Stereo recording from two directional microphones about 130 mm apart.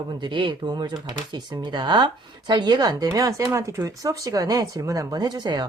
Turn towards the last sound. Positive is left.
turn(degrees=-30)  # may be behind; listen again after turning